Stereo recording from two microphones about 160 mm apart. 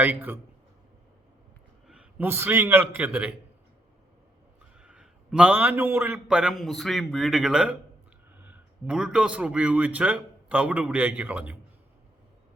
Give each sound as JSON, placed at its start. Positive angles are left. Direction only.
{"t": 0.0, "sound": "a man's voice", "side_deg": -10}
{"t": 1.9, "sound": "a man's voice", "side_deg": -10}
{"t": 4.8, "sound": "a man's voice", "side_deg": -5}